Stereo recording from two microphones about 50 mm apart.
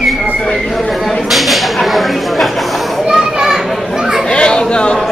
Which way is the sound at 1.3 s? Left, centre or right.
Centre.